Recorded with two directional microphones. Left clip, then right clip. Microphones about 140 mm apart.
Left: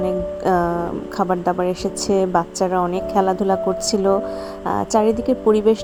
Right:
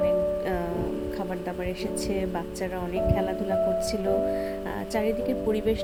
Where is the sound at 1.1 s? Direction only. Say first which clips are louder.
Left 12 dB; 40° left (ahead or behind).